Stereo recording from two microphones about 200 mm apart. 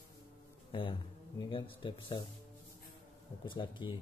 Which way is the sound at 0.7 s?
25° left (ahead or behind).